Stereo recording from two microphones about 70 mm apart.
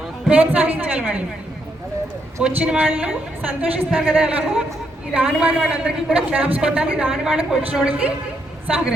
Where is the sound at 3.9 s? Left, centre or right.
Centre.